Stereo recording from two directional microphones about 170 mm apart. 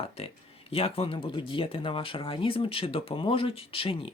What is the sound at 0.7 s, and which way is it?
Speech, 35° left (ahead or behind).